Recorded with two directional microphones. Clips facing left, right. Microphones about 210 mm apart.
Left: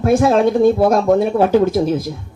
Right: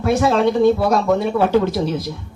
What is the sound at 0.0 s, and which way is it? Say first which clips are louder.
Speech: left 3 dB; 50° left (ahead or behind).